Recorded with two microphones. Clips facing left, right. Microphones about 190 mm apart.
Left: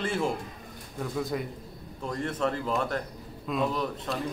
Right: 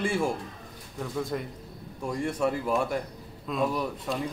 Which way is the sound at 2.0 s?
10° right (ahead or behind).